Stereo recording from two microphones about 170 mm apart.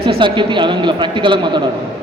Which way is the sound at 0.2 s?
30° right (ahead or behind).